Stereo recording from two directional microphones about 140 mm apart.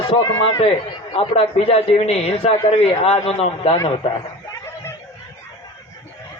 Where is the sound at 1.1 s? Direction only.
45° left (ahead or behind).